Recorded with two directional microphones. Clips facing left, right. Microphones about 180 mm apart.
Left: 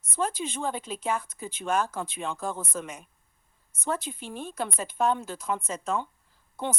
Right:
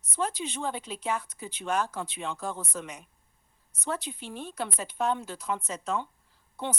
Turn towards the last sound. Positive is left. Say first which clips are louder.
# left 2 dB
turn(degrees=50)  # may be behind; listen again after turning